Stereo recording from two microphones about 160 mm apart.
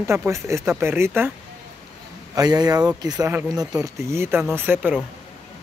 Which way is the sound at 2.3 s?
25° right (ahead or behind).